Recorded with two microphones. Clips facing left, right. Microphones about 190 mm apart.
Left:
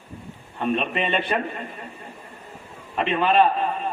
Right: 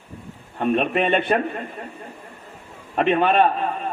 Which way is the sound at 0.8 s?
50° right (ahead or behind).